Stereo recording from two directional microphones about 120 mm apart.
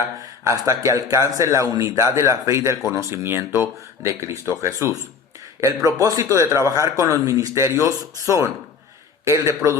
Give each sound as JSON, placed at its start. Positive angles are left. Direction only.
{"t": 0.4, "sound": "a man's voice", "side_deg": -25}